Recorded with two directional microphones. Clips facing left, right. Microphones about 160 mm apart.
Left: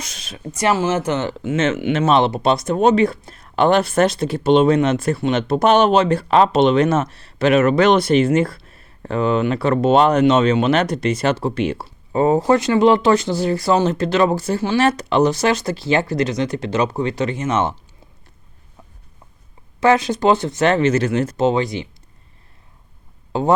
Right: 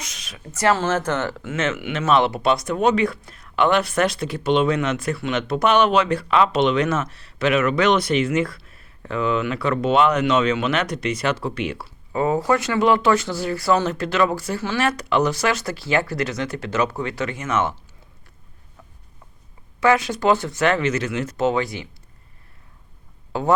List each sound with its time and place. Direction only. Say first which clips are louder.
0.1 s a sound: left 5 dB; 30° left (ahead or behind)
0.5 s speech: left 2 dB; 15° left (ahead or behind)
19.8 s speech: left 3 dB; 25° left (ahead or behind)
21.3 s speech: left 3 dB; 20° left (ahead or behind)
23.3 s speech: left 4 dB; 20° left (ahead or behind)